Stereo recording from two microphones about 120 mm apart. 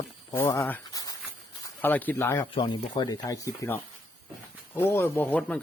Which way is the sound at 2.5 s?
35° left (ahead or behind).